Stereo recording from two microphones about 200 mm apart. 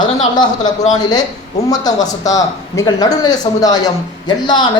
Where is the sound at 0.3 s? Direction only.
20° left (ahead or behind).